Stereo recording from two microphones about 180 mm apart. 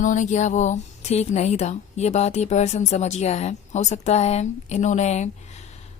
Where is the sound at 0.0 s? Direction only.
45° left (ahead or behind).